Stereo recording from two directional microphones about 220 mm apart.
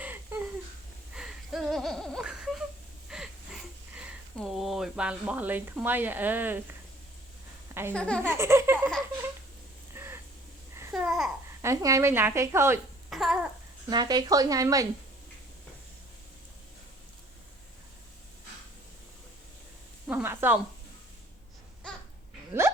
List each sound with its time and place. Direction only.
0.0 s a sound: 10° right (ahead or behind)
7.7 s speech: 10° right (ahead or behind)
7.9 s speech: 5° left (ahead or behind)
8.2 s baby laughter: 10° right (ahead or behind)
9.9 s a sound: 10° right (ahead or behind)
10.8 s babbling: 5° right (ahead or behind)
11.6 s speech: 15° right (ahead or behind)
13.1 s babbling: centre (ahead or behind)
13.9 s speech: 20° right (ahead or behind)
20.1 s a sound: 10° right (ahead or behind)